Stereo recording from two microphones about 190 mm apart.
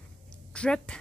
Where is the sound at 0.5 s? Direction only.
5° left (ahead or behind).